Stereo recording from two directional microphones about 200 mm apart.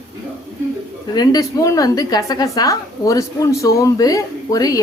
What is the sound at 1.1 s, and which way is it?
A woman's voice, 20° left (ahead or behind).